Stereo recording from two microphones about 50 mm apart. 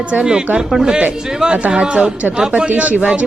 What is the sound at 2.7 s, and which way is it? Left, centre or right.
Speech, right.